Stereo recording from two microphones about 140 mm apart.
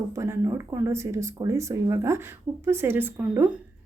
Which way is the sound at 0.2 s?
20° right (ahead or behind).